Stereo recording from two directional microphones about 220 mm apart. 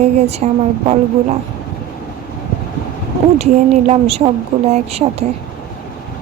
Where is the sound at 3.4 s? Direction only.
30° right (ahead or behind).